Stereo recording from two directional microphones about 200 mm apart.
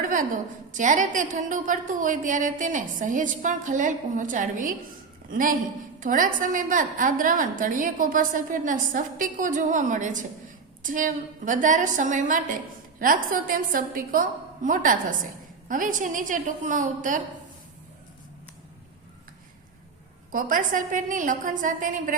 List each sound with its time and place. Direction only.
0.0 s a sound: 40° right (ahead or behind)
0.7 s a woman's voice: 40° right (ahead or behind)
20.3 s a woman's voice: 40° right (ahead or behind)